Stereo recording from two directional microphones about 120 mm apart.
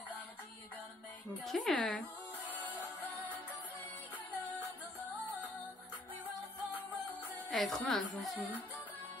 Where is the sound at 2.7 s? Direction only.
15° left (ahead or behind).